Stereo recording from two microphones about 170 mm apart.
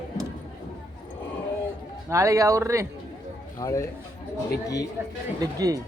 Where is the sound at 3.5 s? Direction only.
20° left (ahead or behind).